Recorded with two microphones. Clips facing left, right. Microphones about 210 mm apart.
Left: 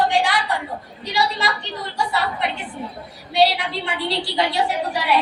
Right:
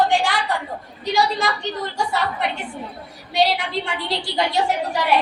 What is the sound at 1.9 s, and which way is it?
A woman's voice, 45° right (ahead or behind).